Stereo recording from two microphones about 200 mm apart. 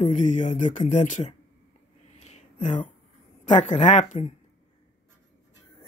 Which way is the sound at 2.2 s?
35° left (ahead or behind).